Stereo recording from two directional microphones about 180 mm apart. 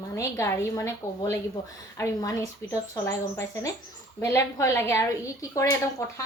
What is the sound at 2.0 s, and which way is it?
A woman's voice, 15° left (ahead or behind).